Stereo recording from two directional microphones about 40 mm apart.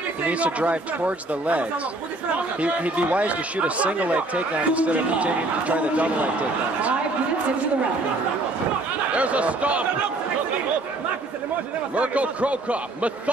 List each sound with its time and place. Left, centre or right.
0.3 s speech: right
9.1 s speech: right
11.9 s speech: right